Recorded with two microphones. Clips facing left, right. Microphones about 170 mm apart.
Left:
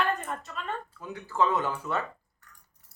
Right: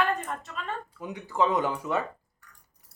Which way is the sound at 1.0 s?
15° right (ahead or behind).